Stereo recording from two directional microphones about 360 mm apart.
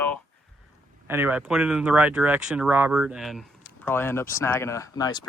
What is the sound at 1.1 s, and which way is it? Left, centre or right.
Speech, centre.